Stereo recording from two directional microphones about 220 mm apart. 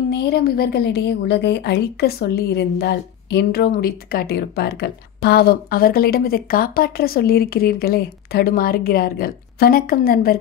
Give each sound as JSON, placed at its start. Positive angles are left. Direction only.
{"t": 0.1, "sound": "a woman's voice", "side_deg": 45}